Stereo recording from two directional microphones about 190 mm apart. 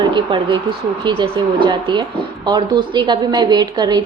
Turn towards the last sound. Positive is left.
turn(degrees=-20)  # may be behind; listen again after turning